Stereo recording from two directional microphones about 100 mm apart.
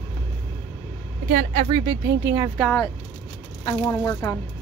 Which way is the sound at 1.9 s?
30° right (ahead or behind).